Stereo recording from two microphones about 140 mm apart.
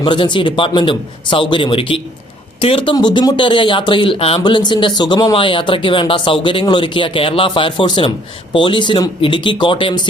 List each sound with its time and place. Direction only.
0.0 s speech: 35° left (ahead or behind)